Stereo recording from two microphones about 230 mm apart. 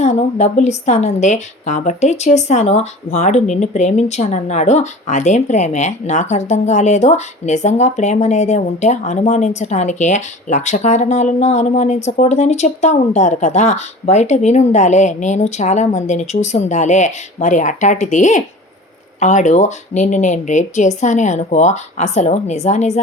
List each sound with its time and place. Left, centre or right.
0.0 s a woman's voice: left